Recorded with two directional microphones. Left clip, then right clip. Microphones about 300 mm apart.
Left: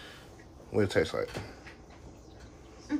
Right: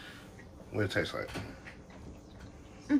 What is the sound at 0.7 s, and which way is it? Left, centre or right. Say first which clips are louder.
Speech: left 5 dB; left.